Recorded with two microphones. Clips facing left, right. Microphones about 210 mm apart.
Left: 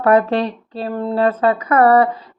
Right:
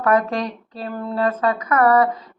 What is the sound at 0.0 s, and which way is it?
Speech, 30° left (ahead or behind).